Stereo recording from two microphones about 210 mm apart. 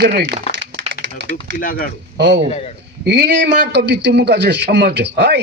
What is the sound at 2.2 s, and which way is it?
A man's voice, 55° right (ahead or behind).